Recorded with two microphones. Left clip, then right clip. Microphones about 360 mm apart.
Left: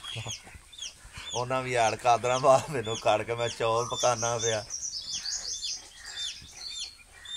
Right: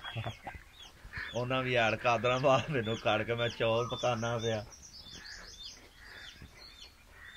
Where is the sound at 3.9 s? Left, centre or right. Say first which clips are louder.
Left 6 dB; left.